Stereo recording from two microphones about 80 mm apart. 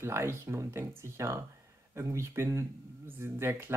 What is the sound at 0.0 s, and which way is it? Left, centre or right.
Speech, right.